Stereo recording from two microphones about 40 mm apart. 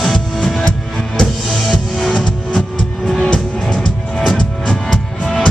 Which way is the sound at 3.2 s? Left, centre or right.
Left.